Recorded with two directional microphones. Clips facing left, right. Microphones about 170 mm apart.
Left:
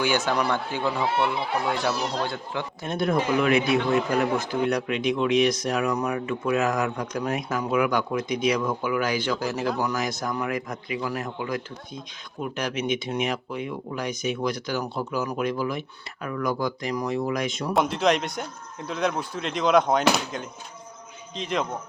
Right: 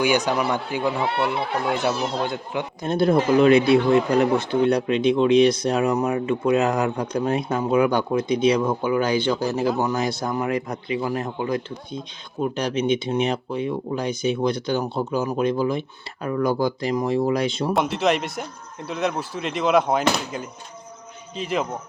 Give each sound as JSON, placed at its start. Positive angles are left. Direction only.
{"t": 0.0, "sound": "speech", "side_deg": -15}
{"t": 1.0, "sound": "speech", "side_deg": -65}
{"t": 2.2, "sound": "speech", "side_deg": -15}
{"t": 2.8, "sound": "a man's voice", "side_deg": -30}
{"t": 17.7, "sound": "speech", "side_deg": 0}